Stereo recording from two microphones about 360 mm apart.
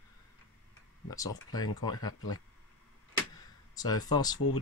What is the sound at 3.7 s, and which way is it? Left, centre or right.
Speech, centre.